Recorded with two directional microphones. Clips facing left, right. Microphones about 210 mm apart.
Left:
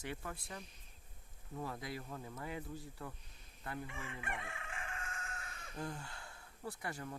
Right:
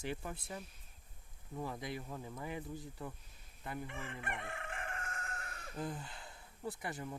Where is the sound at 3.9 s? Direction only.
55° right (ahead or behind).